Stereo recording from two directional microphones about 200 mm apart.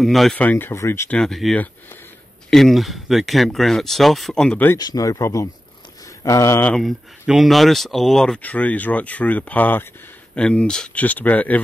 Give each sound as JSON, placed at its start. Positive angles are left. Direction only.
{"t": 0.0, "sound": "speech", "side_deg": 0}
{"t": 4.7, "sound": "speech", "side_deg": 20}